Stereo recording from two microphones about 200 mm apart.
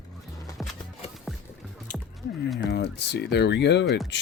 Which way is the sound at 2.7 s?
60° left (ahead or behind).